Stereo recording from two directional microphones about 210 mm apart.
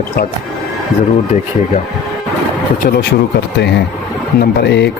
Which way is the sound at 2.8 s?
40° left (ahead or behind).